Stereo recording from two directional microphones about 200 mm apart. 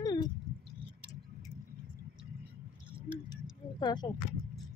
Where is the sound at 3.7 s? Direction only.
20° left (ahead or behind).